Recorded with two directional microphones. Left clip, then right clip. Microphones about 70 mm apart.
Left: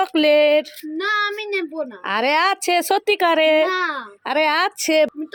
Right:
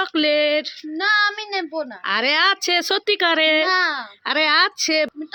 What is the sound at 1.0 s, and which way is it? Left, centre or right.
Child singing, right.